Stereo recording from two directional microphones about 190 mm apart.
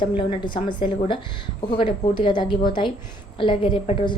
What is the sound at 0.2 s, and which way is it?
A woman's voice, 25° left (ahead or behind).